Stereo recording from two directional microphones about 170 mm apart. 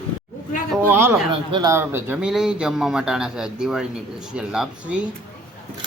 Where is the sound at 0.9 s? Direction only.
15° right (ahead or behind).